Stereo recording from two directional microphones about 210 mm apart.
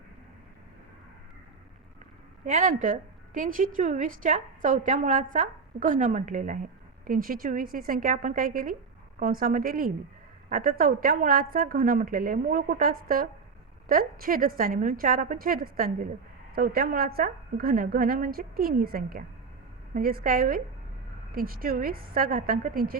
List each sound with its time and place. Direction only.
2.5 s a woman's voice: 40° right (ahead or behind)